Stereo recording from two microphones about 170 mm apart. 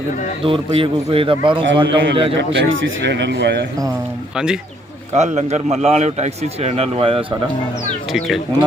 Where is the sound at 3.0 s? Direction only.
90° right.